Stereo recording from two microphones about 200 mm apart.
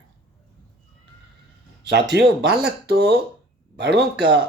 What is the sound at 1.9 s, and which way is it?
Speech, 60° right (ahead or behind).